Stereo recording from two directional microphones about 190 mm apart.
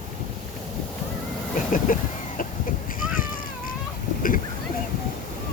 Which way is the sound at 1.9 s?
45° left (ahead or behind).